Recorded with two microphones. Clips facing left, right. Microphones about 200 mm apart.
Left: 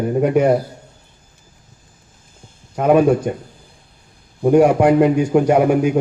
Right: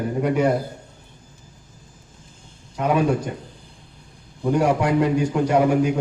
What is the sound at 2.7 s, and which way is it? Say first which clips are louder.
Speech: left 7 dB; 50° left (ahead or behind).